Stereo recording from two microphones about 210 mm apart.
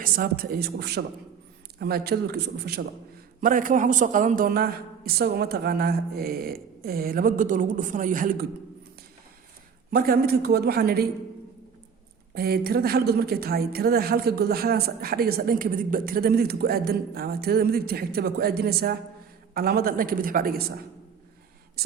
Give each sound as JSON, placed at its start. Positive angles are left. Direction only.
{"t": 0.0, "sound": "a woman's voice", "side_deg": -45}
{"t": 9.9, "sound": "a woman's voice", "side_deg": -45}
{"t": 12.3, "sound": "a woman's voice", "side_deg": -50}
{"t": 21.8, "sound": "whispering", "side_deg": -50}